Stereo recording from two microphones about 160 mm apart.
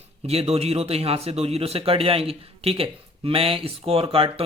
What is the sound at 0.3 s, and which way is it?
A man's voice, 40° right (ahead or behind).